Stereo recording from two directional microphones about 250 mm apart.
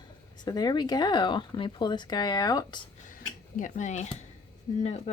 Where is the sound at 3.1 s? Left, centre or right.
Left.